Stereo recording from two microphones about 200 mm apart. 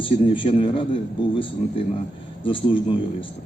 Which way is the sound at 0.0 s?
25° left (ahead or behind).